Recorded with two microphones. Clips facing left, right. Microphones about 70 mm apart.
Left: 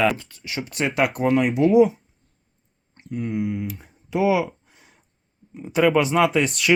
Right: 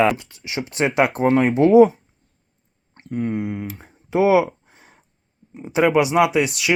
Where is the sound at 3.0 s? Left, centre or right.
Right.